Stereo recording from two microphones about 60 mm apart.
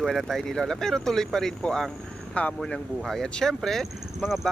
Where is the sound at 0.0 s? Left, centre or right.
Centre.